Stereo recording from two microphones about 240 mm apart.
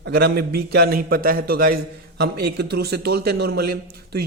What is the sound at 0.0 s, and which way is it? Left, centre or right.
A man's voice, right.